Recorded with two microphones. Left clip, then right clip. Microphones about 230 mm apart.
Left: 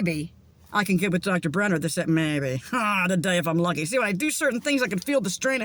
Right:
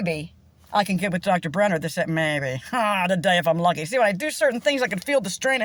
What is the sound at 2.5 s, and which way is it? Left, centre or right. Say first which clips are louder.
Speech: right 2 dB; centre.